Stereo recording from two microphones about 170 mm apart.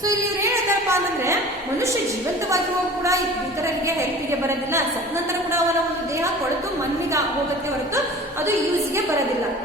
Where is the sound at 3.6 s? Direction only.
15° right (ahead or behind).